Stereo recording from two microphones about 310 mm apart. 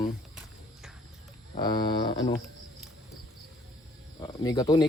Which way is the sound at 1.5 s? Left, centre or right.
Centre.